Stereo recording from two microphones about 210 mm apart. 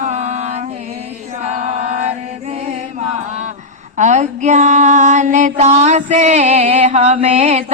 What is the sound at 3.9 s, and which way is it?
Female singing, 35° right (ahead or behind).